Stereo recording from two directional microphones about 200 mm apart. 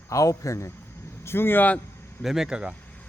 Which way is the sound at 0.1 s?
15° left (ahead or behind).